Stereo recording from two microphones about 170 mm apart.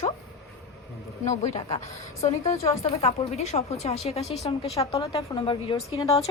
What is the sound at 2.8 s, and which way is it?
A woman's voice, 40° left (ahead or behind).